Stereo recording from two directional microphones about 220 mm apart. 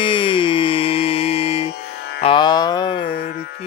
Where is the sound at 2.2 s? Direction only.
20° left (ahead or behind).